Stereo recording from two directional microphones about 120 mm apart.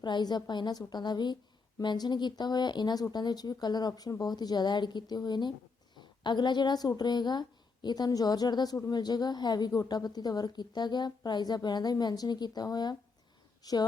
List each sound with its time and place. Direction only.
0.0 s a woman's voice: 35° left (ahead or behind)